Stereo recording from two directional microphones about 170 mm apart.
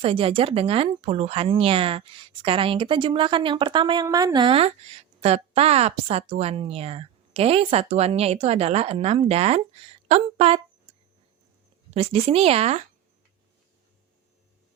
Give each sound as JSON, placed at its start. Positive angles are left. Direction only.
{"t": 0.0, "sound": "speech", "side_deg": -30}
{"t": 11.9, "sound": "speech", "side_deg": -35}